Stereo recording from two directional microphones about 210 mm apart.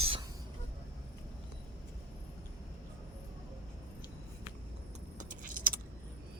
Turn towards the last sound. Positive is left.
turn(degrees=-40)  # may be behind; listen again after turning